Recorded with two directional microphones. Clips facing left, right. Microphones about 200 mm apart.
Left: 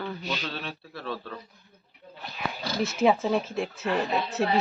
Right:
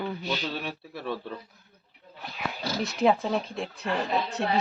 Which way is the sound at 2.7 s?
Centre (ahead or behind).